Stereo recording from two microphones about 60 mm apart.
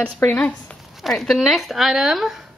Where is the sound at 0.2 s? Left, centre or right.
Left.